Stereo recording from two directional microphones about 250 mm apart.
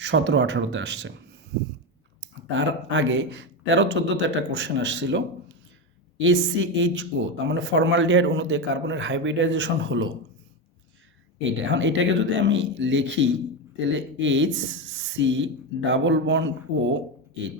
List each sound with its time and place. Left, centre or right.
0.0 s speech: right
2.5 s speech: right
11.3 s speech: right